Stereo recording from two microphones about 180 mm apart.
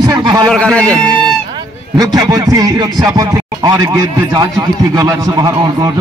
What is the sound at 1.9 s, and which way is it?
Speech, 20° right (ahead or behind).